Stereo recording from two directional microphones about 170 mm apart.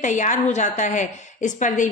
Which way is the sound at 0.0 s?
45° left (ahead or behind).